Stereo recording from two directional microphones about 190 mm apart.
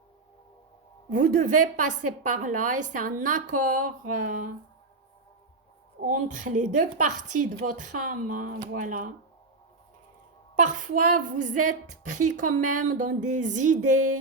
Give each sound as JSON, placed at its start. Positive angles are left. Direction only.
{"t": 1.1, "sound": "a woman's voice", "side_deg": -40}
{"t": 6.0, "sound": "a woman's voice", "side_deg": -45}
{"t": 10.5, "sound": "speech", "side_deg": -40}